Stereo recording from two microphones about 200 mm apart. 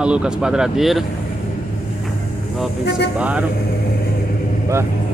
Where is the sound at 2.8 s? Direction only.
55° left (ahead or behind).